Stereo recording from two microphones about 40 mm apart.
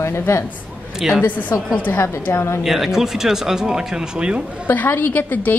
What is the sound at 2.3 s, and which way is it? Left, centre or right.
Speech, left.